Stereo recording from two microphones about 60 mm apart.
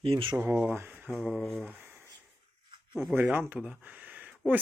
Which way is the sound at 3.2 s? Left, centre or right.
Right.